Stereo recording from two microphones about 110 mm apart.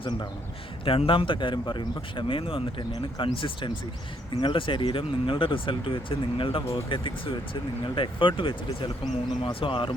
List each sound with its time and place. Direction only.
0.9 s speech: 55° left (ahead or behind)